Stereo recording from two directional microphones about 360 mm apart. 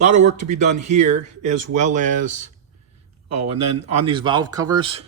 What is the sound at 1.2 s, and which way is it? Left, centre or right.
Speech, right.